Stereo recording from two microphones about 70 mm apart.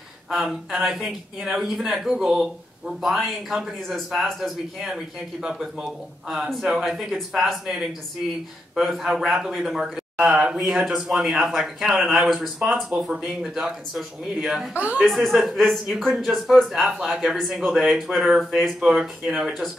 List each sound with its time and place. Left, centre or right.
0.3 s a man's voice: centre
14.7 s a woman's voice: centre
15.0 s a man's voice: centre